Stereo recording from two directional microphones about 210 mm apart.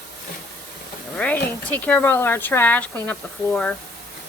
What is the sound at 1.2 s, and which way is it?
Speech, 5° left (ahead or behind).